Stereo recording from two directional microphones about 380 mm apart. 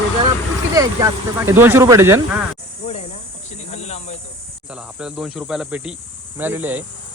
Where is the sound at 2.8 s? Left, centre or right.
Centre.